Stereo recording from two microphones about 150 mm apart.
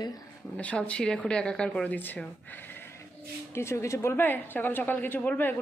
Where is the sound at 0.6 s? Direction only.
10° left (ahead or behind).